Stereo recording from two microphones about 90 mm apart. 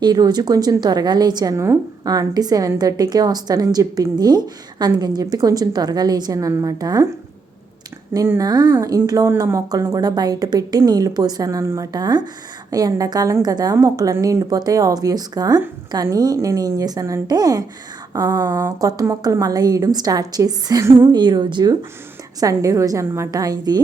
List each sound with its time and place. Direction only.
0.0 s a woman's voice: 50° right (ahead or behind)
1.5 s a woman's voice: 35° right (ahead or behind)
8.4 s a woman's voice: 50° right (ahead or behind); by 11.9 s 35° right (ahead or behind)
11.9 s a woman's voice: 45° right (ahead or behind)
18.4 s speech: 25° right (ahead or behind)
18.8 s a woman's voice: 40° right (ahead or behind)
21.1 s a woman's voice: 55° right (ahead or behind)
22.4 s a woman's voice: 40° right (ahead or behind)
23.3 s a woman's voice: 45° right (ahead or behind)